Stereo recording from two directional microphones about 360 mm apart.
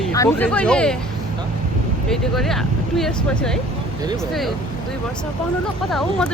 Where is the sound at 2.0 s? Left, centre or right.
Centre.